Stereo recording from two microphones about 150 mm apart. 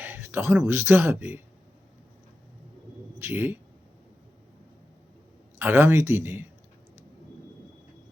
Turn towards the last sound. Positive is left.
turn(degrees=-15)  # may be behind; listen again after turning